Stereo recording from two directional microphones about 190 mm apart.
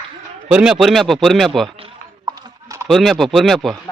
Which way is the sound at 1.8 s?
20° right (ahead or behind).